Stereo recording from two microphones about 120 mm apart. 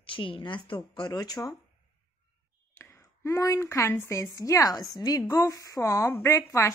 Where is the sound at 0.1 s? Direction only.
45° left (ahead or behind).